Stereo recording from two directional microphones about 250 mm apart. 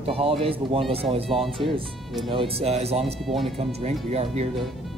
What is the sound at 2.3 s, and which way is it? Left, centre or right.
Speech, right.